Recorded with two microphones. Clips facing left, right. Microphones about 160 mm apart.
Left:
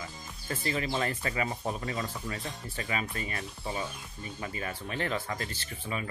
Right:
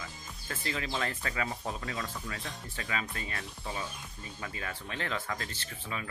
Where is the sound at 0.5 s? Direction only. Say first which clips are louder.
Left 4 dB; 5° left (ahead or behind).